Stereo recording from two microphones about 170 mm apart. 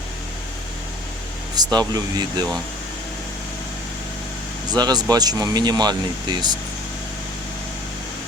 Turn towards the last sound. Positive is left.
turn(degrees=-25)  # may be behind; listen again after turning